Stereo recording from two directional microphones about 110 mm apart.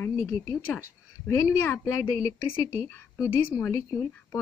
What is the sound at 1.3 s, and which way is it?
A woman's voice, 25° left (ahead or behind).